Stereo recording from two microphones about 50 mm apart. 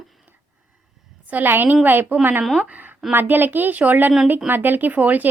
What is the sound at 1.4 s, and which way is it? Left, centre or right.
A woman's voice, right.